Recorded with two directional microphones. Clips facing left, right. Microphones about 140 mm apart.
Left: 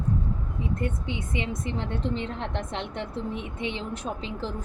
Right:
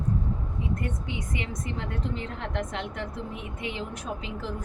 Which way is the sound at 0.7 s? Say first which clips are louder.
Left 2 dB; 25° left (ahead or behind).